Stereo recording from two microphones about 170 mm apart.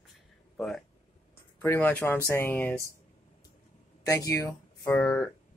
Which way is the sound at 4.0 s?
20° left (ahead or behind).